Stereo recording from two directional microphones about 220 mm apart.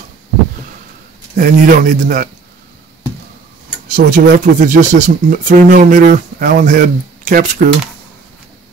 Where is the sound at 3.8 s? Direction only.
40° right (ahead or behind).